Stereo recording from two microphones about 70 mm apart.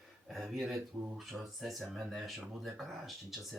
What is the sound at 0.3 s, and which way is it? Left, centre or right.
Speech, centre.